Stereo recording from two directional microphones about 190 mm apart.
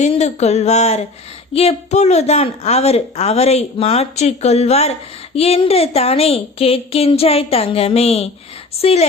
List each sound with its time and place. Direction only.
0.0 s a woman's voice: 35° left (ahead or behind)